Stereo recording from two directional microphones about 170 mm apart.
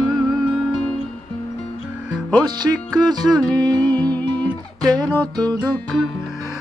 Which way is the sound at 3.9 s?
10° left (ahead or behind).